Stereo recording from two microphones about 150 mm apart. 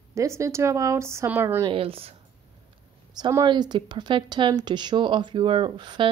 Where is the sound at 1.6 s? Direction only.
40° right (ahead or behind).